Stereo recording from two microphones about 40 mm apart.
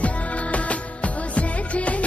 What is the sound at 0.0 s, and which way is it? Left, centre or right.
Music, left.